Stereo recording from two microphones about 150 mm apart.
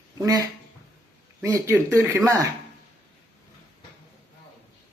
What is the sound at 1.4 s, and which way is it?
Speech, 20° right (ahead or behind).